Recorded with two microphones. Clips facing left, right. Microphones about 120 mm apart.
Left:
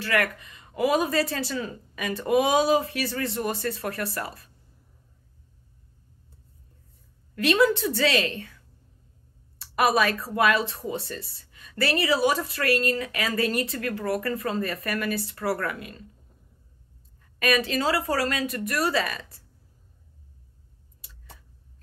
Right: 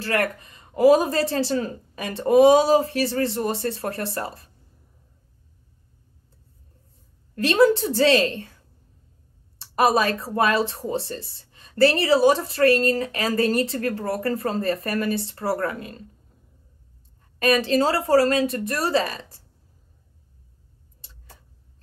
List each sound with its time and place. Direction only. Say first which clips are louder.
0.0 s speech: right 2 dB; 35° right (ahead or behind)
7.3 s speech: right 4 dB; 30° right (ahead or behind)
9.6 s a woman's voice: right 3 dB; 30° right (ahead or behind)
17.4 s speech: right 5 dB; 30° right (ahead or behind)